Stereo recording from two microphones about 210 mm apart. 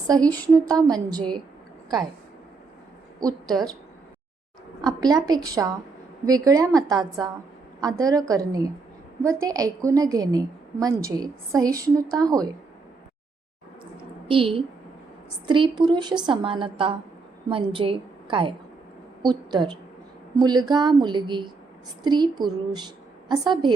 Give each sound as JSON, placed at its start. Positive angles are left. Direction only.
{"t": 0.3, "sound": "a woman's voice", "side_deg": -20}
{"t": 4.8, "sound": "a woman's voice", "side_deg": -20}
{"t": 14.3, "sound": "a woman's voice", "side_deg": -25}